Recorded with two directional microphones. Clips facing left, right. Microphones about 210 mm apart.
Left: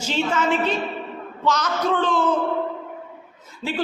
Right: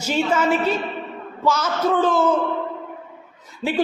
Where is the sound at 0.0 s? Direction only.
10° right (ahead or behind).